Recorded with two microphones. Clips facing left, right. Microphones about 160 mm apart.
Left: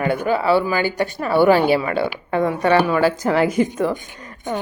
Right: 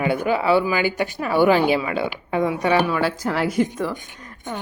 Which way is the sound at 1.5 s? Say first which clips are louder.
Left 2 dB; 40° left (ahead or behind).